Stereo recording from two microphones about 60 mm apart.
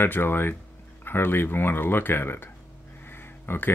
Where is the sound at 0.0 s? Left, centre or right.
Left.